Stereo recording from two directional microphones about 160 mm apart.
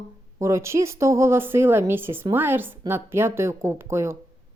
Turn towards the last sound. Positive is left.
turn(degrees=-15)  # may be behind; listen again after turning